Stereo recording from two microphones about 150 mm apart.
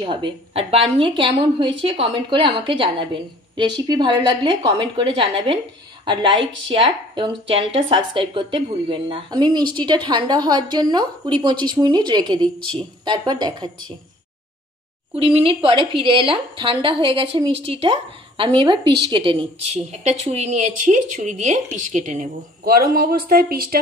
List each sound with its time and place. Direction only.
0.0 s a woman's voice: 35° right (ahead or behind)
15.1 s a woman's voice: 40° right (ahead or behind); by 22.3 s 55° right (ahead or behind)
22.7 s speech: 75° right (ahead or behind)